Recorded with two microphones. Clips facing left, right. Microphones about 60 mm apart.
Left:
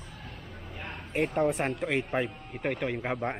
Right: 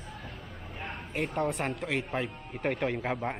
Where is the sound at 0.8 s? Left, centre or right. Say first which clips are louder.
Left 4 dB; centre.